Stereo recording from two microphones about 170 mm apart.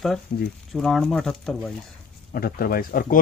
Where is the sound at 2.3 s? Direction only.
60° left (ahead or behind).